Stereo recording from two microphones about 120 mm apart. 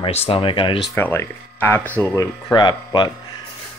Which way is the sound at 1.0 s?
15° left (ahead or behind).